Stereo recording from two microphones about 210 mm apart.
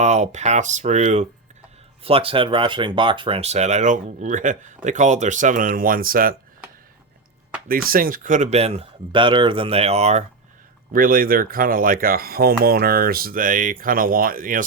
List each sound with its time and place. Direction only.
0.0 s speech: 35° right (ahead or behind)
7.7 s speech: 45° right (ahead or behind)
10.9 s speech: 40° right (ahead or behind)